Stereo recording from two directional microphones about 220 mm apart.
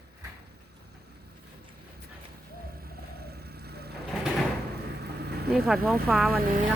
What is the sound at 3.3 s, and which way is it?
Vehicle, 45° right (ahead or behind).